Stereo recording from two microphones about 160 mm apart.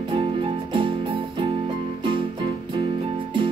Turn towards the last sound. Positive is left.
turn(degrees=-35)  # may be behind; listen again after turning